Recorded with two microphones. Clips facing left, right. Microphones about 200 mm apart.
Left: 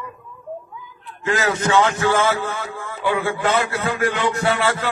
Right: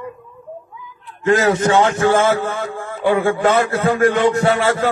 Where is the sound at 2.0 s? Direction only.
45° right (ahead or behind).